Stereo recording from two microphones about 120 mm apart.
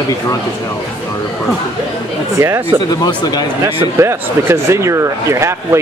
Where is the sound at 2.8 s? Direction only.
35° left (ahead or behind).